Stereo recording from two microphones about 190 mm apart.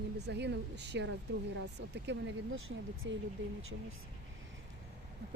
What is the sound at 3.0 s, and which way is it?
Speech, 75° right (ahead or behind).